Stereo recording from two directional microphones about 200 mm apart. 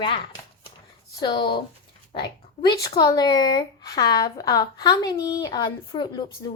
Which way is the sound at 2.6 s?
20° left (ahead or behind).